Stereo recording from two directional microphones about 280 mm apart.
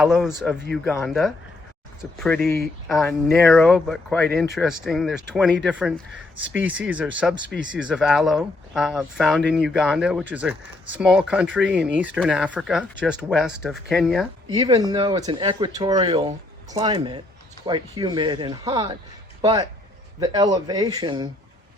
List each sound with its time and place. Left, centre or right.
0.0 s speech: centre
6.8 s speech: centre
14.5 s speech: centre